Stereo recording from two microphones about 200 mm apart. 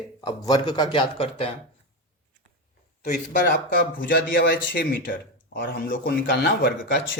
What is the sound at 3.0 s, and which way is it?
Speech, 40° left (ahead or behind).